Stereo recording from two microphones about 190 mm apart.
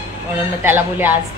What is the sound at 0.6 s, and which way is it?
Speech, 10° right (ahead or behind).